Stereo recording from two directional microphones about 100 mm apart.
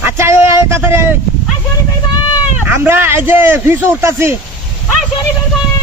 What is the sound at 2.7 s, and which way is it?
Speech, 20° right (ahead or behind).